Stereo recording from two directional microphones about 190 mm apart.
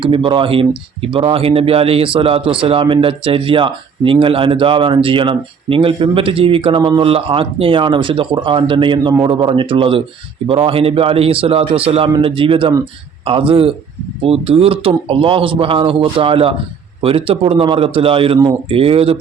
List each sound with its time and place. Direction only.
0.0 s speech: 25° right (ahead or behind)